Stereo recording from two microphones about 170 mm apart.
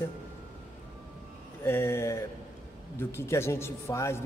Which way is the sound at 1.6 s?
15° left (ahead or behind).